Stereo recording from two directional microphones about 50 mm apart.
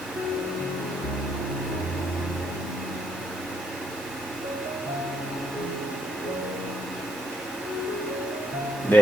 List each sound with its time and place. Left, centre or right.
8.9 s speech: left